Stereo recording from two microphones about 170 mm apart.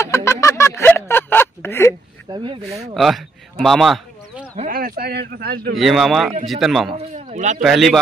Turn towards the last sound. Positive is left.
turn(degrees=0)  # may be behind; listen again after turning